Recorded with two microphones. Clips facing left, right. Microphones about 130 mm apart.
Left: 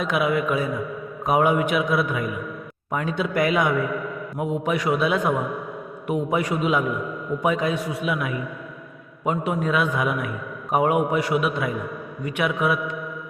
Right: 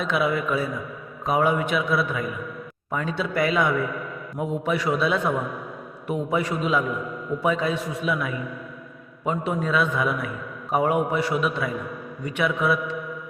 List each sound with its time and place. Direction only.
0.1 s a man's voice: 10° left (ahead or behind)